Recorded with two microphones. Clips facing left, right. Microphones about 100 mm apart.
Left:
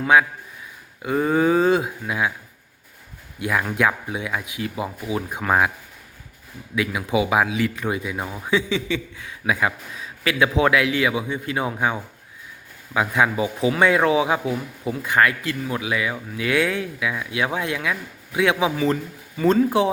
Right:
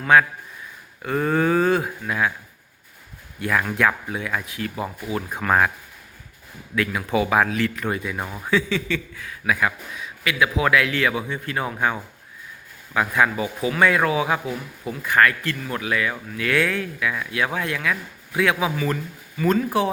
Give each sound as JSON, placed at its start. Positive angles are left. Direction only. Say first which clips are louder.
{"t": 0.0, "sound": "speech", "louder": "even", "side_deg": 15}
{"t": 3.4, "sound": "speech", "louder": "even", "side_deg": 15}
{"t": 6.7, "sound": "a man's voice", "louder": "even", "side_deg": 10}
{"t": 8.4, "sound": "speech", "louder": "even", "side_deg": 15}